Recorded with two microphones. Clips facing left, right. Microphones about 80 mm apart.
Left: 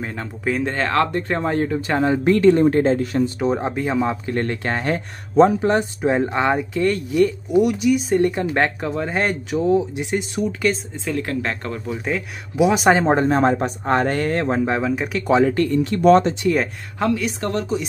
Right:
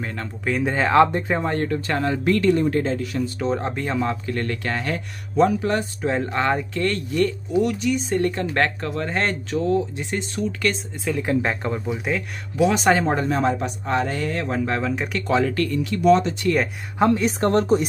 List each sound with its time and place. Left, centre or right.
0.0 s speech: centre
0.6 s speech: centre
1.2 s speech: centre
2.2 s speech: left
3.3 s speech: centre
4.3 s speech: left
10.7 s speech: centre
11.2 s speech: centre
12.1 s speech: centre
13.0 s speech: left
14.8 s speech: centre
15.3 s speech: left
17.0 s a woman's voice: right